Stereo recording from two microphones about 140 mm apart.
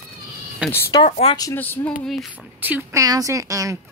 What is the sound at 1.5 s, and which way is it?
Speech, 15° left (ahead or behind).